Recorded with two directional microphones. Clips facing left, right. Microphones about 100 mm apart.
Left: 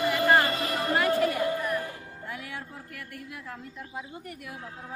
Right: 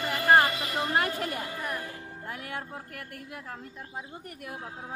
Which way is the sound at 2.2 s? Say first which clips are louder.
Right 1 dB; 45° right (ahead or behind).